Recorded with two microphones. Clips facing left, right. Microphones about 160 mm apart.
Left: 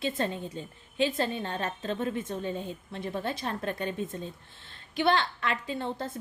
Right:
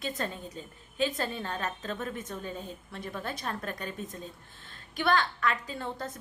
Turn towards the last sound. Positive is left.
turn(degrees=25)  # may be behind; listen again after turning